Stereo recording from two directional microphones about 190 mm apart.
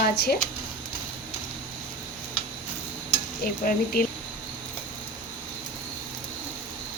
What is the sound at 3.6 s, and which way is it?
Dishes, 45° left (ahead or behind).